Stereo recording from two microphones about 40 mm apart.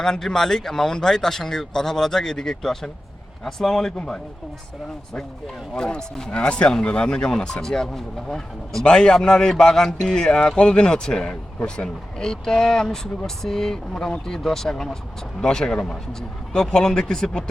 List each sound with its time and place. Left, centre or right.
0.0 s a man's voice: centre
5.7 s a man's voice: centre